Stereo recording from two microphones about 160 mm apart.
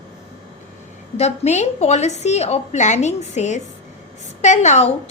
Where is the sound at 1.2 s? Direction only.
45° left (ahead or behind).